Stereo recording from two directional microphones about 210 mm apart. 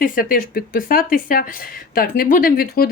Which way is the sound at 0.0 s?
40° left (ahead or behind).